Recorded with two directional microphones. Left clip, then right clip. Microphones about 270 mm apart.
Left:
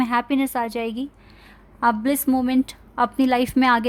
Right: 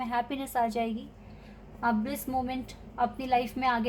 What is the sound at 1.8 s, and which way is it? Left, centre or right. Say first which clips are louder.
A woman's voice: left 10 dB; left.